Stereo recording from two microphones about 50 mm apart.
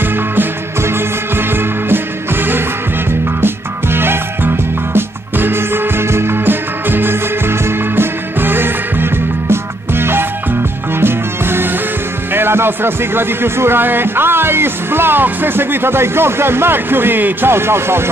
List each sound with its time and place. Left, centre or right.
0.8 s music: right
3.3 s music: right
12.4 s a man's voice: right